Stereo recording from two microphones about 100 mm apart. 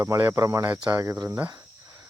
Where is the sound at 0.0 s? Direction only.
25° right (ahead or behind).